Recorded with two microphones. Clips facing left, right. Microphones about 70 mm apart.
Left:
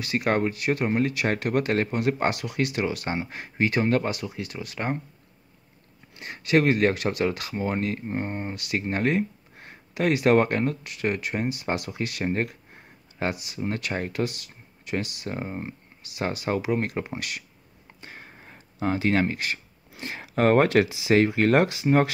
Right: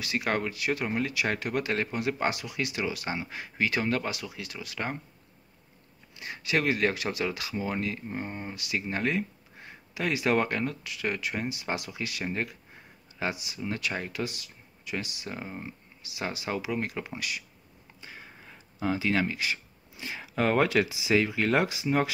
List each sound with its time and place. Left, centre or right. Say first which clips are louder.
0.0 s speech: left 5 dB; left
6.1 s speech: left 7 dB; left
18.0 s a sound: left 2 dB; left
20.0 s speech: left 5 dB; left